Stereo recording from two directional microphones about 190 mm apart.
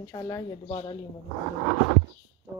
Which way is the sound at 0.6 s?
30° left (ahead or behind).